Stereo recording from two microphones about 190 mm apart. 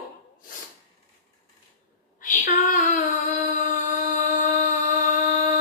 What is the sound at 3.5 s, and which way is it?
Chant, 40° left (ahead or behind).